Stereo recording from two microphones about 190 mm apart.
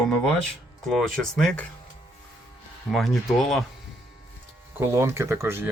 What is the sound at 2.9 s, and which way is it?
Speech, centre (ahead or behind).